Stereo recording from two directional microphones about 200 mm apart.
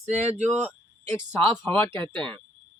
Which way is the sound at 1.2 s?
10° left (ahead or behind).